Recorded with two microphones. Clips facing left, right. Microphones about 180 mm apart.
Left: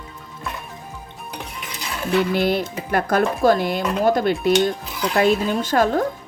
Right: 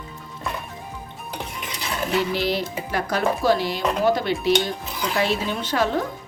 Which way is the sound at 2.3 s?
50° left (ahead or behind).